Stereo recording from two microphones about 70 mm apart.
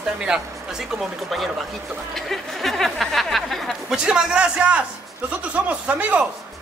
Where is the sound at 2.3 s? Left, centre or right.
Centre.